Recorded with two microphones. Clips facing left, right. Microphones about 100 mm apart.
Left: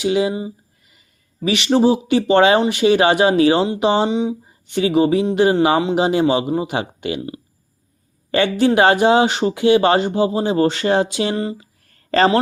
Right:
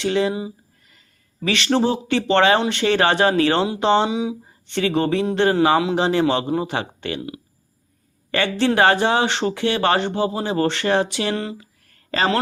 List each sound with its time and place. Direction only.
0.0 s speech: 10° left (ahead or behind)
4.1 s speech: 5° right (ahead or behind)
4.7 s speech: 10° left (ahead or behind)
8.3 s speech: 20° left (ahead or behind)